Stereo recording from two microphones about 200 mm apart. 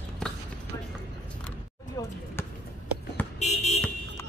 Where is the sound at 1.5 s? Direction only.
10° left (ahead or behind).